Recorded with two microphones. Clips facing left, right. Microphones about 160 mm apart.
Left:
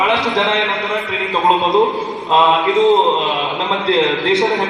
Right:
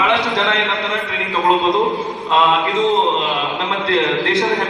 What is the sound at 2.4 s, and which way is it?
Speech, centre (ahead or behind).